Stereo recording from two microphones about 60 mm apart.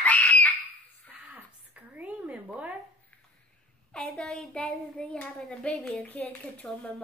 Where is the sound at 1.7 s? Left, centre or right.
Right.